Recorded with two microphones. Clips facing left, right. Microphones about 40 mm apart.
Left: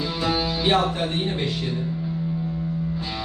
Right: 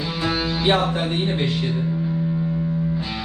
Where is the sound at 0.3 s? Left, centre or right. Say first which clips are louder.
Right 2 dB; centre.